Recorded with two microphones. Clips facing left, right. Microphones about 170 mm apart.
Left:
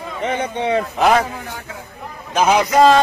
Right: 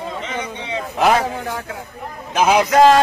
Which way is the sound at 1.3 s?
70° right (ahead or behind).